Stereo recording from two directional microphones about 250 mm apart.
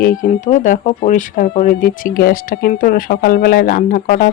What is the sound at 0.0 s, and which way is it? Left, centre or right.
Speech, left.